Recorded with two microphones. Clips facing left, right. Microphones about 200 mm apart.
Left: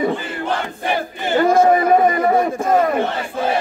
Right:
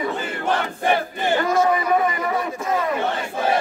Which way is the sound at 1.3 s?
50° left (ahead or behind).